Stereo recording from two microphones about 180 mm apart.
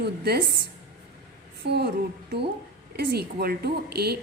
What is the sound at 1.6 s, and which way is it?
Speech, 65° right (ahead or behind).